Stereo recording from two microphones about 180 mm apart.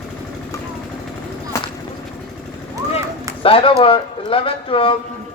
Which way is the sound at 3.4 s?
30° left (ahead or behind).